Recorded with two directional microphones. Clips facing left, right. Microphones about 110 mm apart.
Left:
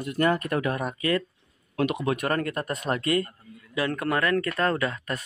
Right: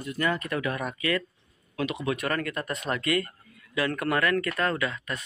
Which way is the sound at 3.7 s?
25° left (ahead or behind).